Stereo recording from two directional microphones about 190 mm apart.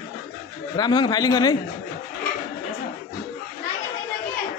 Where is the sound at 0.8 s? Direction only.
20° left (ahead or behind).